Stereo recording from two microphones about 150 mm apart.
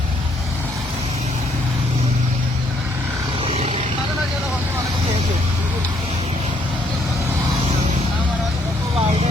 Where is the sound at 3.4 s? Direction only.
40° right (ahead or behind).